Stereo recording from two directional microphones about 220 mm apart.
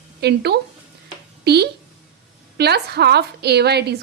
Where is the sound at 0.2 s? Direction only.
50° right (ahead or behind).